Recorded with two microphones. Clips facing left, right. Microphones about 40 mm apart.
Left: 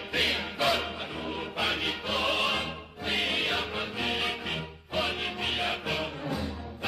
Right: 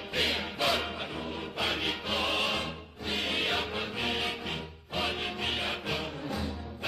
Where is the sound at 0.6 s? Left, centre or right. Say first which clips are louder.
Left 2 dB; centre.